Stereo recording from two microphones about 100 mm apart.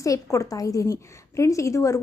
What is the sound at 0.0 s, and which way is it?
A woman's voice, 30° left (ahead or behind).